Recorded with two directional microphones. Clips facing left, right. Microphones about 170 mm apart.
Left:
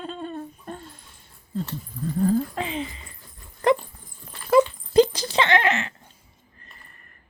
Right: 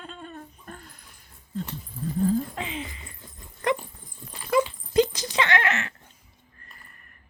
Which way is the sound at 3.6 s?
30° left (ahead or behind).